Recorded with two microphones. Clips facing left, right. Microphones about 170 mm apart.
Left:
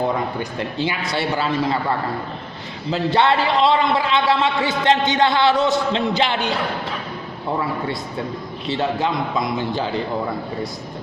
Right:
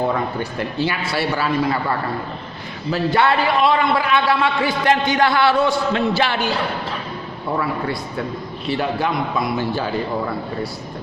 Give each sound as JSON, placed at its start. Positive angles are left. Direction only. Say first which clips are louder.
{"t": 0.1, "sound": "a man's voice", "louder": "right 1 dB", "side_deg": 20}
{"t": 8.7, "sound": "a man's voice", "louder": "even", "side_deg": 25}